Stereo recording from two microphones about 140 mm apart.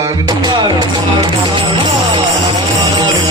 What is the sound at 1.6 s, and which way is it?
Music, 35° right (ahead or behind).